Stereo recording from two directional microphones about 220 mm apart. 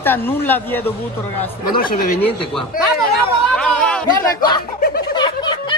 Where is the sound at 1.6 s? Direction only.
40° left (ahead or behind).